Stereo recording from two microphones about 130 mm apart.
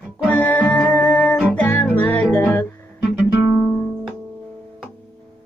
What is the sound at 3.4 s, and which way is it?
Guitar, 20° right (ahead or behind).